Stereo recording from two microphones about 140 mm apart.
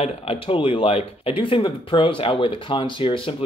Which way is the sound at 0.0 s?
45° left (ahead or behind).